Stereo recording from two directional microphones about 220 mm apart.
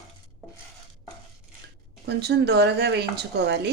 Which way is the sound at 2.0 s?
50° right (ahead or behind).